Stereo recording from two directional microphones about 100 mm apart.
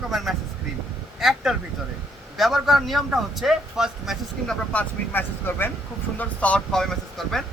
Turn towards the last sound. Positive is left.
turn(degrees=5)  # may be behind; listen again after turning